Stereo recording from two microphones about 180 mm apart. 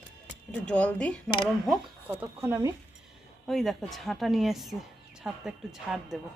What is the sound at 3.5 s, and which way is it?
A woman's voice, centre (ahead or behind).